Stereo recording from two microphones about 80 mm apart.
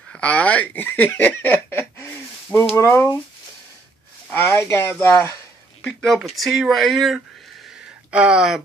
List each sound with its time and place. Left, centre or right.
0.1 s speech: centre
2.8 s speech: left
4.3 s speech: left
5.9 s speech: centre
8.1 s speech: centre